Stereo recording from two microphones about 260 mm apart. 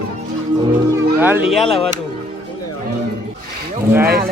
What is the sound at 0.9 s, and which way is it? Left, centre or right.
Speech, centre.